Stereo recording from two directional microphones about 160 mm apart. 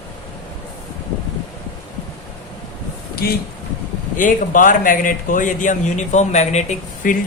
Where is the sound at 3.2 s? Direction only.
70° left (ahead or behind).